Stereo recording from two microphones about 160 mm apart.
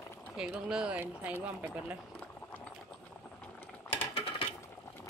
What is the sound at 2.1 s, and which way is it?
Clip-clop, 10° left (ahead or behind).